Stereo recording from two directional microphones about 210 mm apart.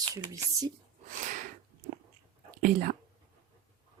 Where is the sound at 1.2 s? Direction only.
40° right (ahead or behind).